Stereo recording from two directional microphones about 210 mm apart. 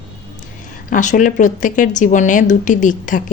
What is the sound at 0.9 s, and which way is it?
Speech, 35° left (ahead or behind).